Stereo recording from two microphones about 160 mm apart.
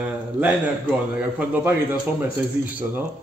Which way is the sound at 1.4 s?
10° right (ahead or behind).